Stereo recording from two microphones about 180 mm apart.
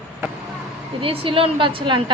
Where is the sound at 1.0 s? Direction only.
30° right (ahead or behind).